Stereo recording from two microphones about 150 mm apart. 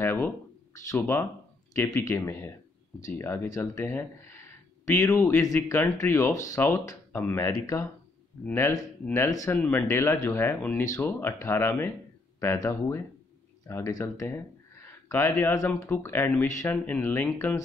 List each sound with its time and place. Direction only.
0.0 s speech: 15° left (ahead or behind)